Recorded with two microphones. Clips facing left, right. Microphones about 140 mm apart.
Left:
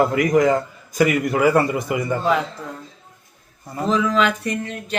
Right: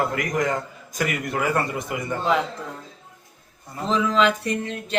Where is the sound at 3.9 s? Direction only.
30° right (ahead or behind).